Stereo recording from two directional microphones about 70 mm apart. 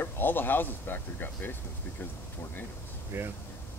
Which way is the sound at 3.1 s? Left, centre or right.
Right.